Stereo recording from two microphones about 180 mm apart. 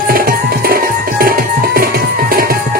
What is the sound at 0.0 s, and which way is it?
Music, 55° right (ahead or behind).